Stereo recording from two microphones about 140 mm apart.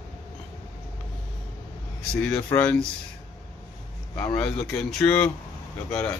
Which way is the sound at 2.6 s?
10° left (ahead or behind).